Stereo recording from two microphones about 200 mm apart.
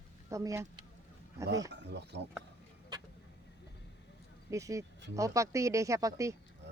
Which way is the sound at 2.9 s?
20° right (ahead or behind).